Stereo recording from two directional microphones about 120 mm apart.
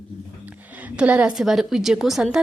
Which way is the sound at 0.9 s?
10° right (ahead or behind).